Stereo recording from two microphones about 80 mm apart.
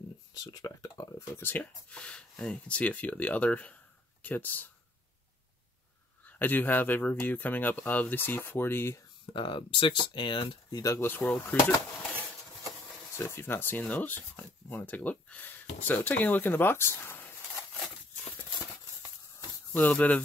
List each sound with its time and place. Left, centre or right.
0.4 s speech: left
1.3 s speech: left
1.6 s speech: centre
6.2 s speech: left
9.2 s speech: left
11.0 s speech: left
13.1 s speech: left
19.7 s speech: centre